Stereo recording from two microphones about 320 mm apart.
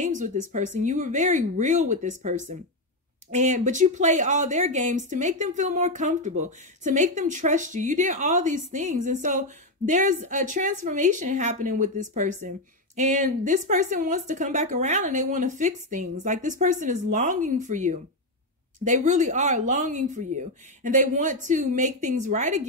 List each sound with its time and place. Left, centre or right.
0.0 s speech: right